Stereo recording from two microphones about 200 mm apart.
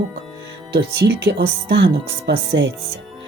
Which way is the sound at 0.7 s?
55° right (ahead or behind).